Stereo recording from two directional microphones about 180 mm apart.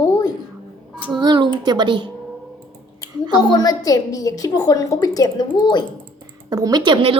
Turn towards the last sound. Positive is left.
turn(degrees=-30)  # may be behind; listen again after turning